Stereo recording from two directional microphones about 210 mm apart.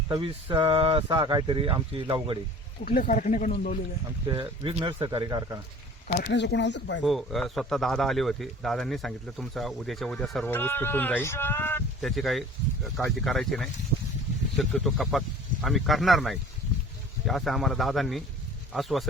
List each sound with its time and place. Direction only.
0.1 s speech: 20° right (ahead or behind)
2.8 s speech: 45° left (ahead or behind)
4.3 s speech: 25° right (ahead or behind)
6.1 s speech: 50° left (ahead or behind)
7.0 s speech: centre (ahead or behind)